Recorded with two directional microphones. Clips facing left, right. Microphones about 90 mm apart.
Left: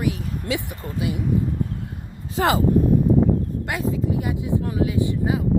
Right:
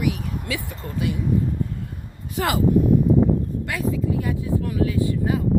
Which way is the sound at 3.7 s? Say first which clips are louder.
Left 1 dB; 30° left (ahead or behind).